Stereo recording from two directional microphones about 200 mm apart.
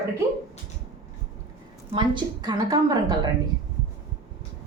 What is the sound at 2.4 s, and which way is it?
Speech, 20° right (ahead or behind).